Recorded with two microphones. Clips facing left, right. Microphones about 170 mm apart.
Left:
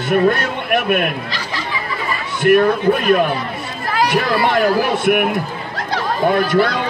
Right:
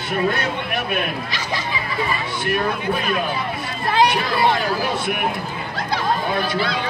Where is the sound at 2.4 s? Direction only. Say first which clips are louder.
Left 12 dB; 55° left (ahead or behind).